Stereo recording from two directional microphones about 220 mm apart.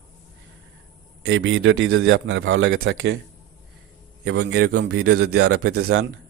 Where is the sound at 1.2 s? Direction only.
60° right (ahead or behind).